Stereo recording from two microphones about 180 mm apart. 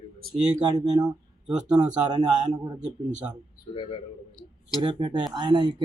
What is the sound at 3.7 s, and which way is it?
Speech, 30° left (ahead or behind).